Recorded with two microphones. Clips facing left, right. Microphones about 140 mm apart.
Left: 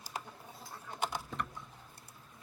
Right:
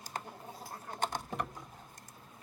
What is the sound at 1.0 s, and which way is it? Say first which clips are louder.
Patter: right 1 dB; 10° left (ahead or behind).